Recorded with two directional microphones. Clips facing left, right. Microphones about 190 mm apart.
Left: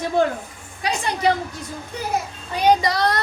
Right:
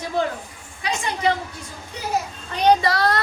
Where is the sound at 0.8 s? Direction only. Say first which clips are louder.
Left 2 dB; 35° left (ahead or behind).